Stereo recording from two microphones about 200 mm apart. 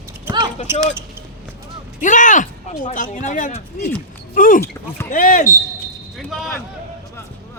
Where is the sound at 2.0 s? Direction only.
40° left (ahead or behind).